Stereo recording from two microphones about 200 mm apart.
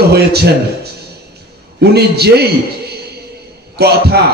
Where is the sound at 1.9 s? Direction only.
55° right (ahead or behind).